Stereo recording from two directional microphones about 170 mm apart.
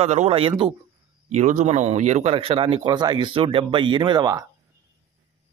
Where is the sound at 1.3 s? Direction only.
45° right (ahead or behind); by 4.4 s 25° right (ahead or behind).